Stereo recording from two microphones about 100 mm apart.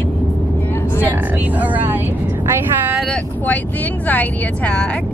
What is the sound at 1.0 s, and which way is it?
Speech, 15° right (ahead or behind).